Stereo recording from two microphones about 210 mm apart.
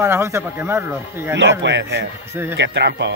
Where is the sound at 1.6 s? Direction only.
55° right (ahead or behind).